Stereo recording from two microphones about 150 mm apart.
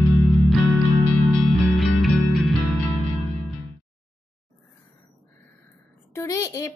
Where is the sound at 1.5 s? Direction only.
Centre (ahead or behind).